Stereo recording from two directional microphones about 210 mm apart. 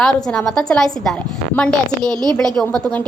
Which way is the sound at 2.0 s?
20° right (ahead or behind).